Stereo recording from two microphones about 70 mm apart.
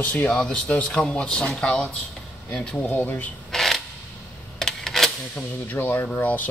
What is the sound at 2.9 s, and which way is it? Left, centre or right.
Speech, left.